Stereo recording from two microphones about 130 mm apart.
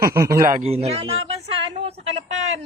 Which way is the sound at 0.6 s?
50° right (ahead or behind).